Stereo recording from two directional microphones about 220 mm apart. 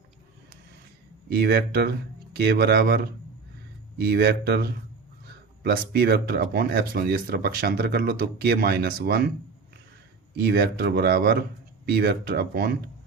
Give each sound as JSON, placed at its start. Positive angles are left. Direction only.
{"t": 1.3, "sound": "speech", "side_deg": -45}
{"t": 10.3, "sound": "speech", "side_deg": -45}